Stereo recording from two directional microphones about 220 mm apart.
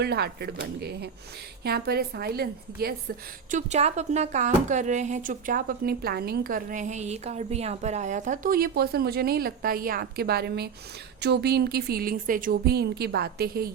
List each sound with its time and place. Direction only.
0.0 s speech: 45° right (ahead or behind)
3.5 s speech: 30° right (ahead or behind)